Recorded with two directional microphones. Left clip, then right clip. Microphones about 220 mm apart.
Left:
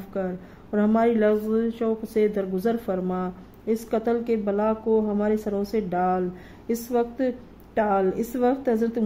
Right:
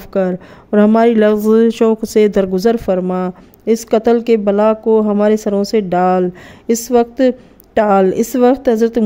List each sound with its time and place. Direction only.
0.1 s speech: 45° right (ahead or behind)